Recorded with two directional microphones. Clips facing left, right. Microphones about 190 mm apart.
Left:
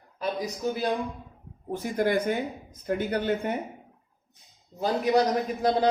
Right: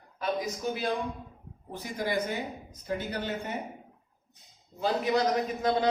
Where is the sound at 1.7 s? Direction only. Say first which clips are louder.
Left 6 dB; 50° left (ahead or behind).